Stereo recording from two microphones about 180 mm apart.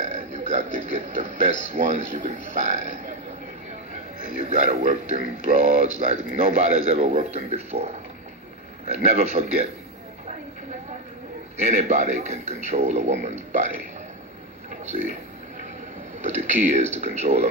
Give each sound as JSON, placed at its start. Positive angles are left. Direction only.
{"t": 0.0, "sound": "burping", "side_deg": -40}
{"t": 1.7, "sound": "a man's voice", "side_deg": -40}
{"t": 4.5, "sound": "a man's voice", "side_deg": -45}
{"t": 11.6, "sound": "a man's voice", "side_deg": -40}
{"t": 16.3, "sound": "a man's voice", "side_deg": -40}